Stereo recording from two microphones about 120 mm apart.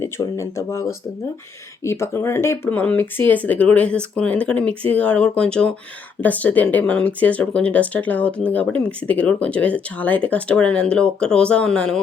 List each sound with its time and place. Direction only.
0.0 s speech: 25° left (ahead or behind); by 11.9 s 10° left (ahead or behind)